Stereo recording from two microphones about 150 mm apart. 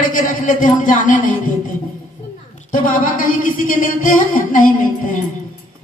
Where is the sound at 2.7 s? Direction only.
65° left (ahead or behind).